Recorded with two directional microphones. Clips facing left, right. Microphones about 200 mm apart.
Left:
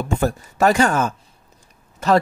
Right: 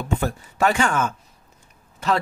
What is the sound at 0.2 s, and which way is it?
Speech, 40° left (ahead or behind).